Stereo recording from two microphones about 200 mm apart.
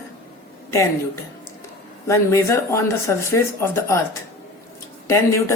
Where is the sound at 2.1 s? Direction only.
15° left (ahead or behind).